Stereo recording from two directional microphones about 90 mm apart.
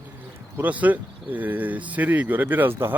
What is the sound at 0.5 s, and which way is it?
Speech, 20° right (ahead or behind).